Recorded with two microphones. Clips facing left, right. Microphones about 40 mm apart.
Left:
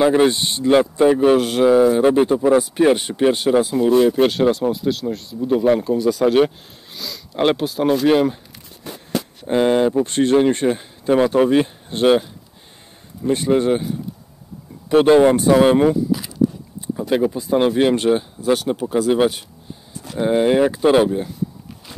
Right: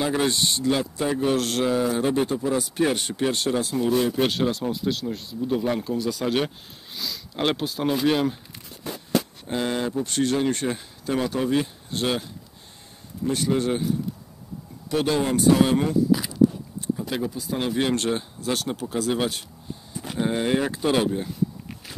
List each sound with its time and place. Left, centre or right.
0.0 s speech: left
0.7 s speech: left
1.4 s speech: centre
4.2 s speech: centre
5.4 s speech: centre
5.8 s speech: centre
7.5 s speech: centre
9.5 s speech: left
13.3 s speech: left
14.9 s speech: left
16.8 s a sound: left
17.2 s speech: left; by 19.4 s centre
19.9 s a sound: centre
20.2 s speech: centre